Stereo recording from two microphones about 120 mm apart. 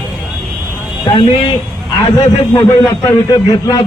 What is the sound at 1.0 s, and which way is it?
Speech, 40° left (ahead or behind).